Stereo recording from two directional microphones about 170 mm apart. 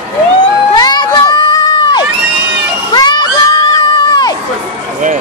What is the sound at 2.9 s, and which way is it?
Crowd, 25° left (ahead or behind).